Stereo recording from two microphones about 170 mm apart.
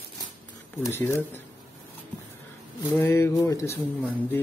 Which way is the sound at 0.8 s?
15° left (ahead or behind).